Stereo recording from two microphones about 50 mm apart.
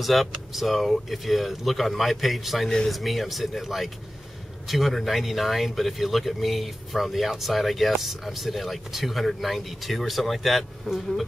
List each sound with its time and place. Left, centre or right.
0.0 s speech: centre